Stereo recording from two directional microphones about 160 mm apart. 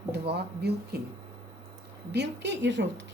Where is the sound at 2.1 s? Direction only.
90° right.